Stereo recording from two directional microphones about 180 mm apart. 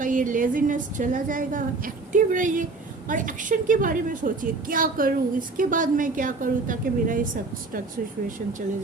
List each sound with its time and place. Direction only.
0.0 s a woman's voice: 45° right (ahead or behind)